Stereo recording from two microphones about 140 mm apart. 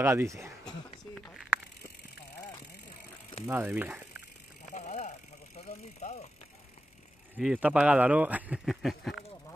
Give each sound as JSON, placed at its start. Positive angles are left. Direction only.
{"t": 0.0, "sound": "speech", "side_deg": -20}
{"t": 0.7, "sound": "a sound", "side_deg": 5}
{"t": 3.4, "sound": "speech", "side_deg": -15}
{"t": 4.6, "sound": "vehicle", "side_deg": 55}
{"t": 5.7, "sound": "speech", "side_deg": 50}
{"t": 7.3, "sound": "speech", "side_deg": -5}